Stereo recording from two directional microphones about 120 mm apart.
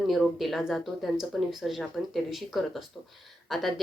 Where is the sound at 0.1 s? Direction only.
Centre (ahead or behind).